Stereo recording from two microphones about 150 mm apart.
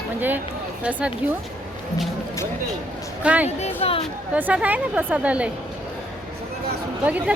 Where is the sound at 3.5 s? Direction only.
45° left (ahead or behind).